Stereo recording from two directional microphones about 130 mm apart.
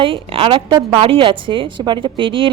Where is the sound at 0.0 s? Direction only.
45° right (ahead or behind).